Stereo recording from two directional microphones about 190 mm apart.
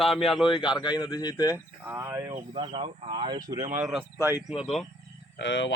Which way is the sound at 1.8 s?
15° right (ahead or behind).